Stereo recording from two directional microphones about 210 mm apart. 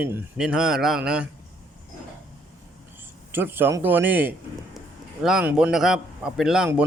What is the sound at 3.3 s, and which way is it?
A man's voice, 10° right (ahead or behind).